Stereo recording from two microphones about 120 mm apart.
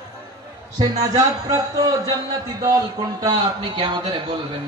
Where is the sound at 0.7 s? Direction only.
35° right (ahead or behind).